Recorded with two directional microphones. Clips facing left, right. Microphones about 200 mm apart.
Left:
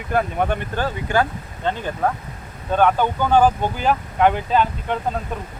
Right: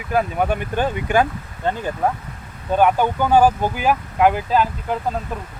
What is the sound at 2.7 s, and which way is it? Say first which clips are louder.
Speech: right 1 dB; 10° right (ahead or behind).